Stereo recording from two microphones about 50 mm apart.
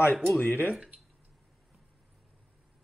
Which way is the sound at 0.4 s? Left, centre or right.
Left.